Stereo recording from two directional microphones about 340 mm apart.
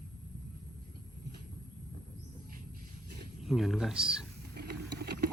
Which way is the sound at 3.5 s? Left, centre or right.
Centre.